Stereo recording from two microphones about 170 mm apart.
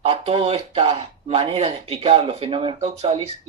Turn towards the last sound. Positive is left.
turn(degrees=-40)  # may be behind; listen again after turning